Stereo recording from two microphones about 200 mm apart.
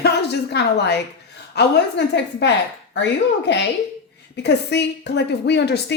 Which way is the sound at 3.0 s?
60° left (ahead or behind).